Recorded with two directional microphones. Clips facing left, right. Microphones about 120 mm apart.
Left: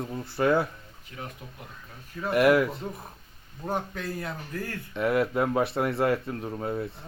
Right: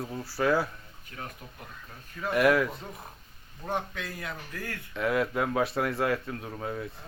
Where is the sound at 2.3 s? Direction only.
Centre (ahead or behind).